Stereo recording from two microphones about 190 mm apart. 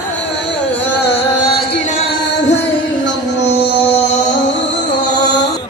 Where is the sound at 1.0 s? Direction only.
60° left (ahead or behind).